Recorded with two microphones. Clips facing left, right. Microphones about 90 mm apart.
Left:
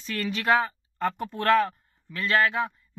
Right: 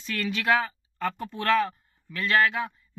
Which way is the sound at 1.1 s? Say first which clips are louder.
Left 2 dB; 50° left (ahead or behind).